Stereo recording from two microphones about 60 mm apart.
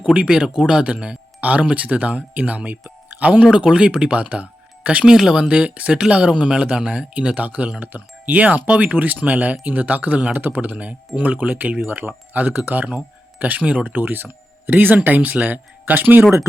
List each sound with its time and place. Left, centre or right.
0.0 s speech: centre; by 16.2 s right